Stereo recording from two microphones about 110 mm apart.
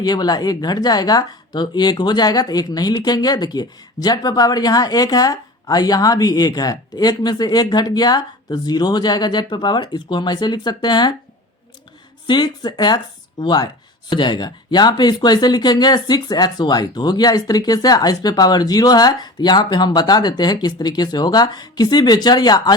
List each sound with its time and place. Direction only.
0.0 s a woman's voice: 35° left (ahead or behind)
12.3 s a woman's voice: 40° left (ahead or behind)